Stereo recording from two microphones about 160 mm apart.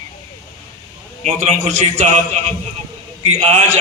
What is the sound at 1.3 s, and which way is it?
A man's voice, 50° right (ahead or behind).